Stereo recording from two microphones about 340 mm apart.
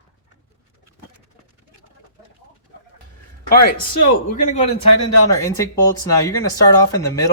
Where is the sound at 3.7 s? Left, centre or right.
Left.